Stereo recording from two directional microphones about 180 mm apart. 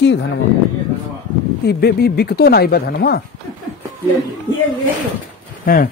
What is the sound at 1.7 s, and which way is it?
Speech, 60° left (ahead or behind).